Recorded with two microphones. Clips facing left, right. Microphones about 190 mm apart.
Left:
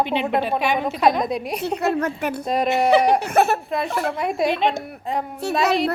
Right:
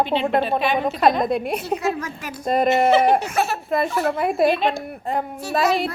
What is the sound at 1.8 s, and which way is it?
Speech, 60° left (ahead or behind).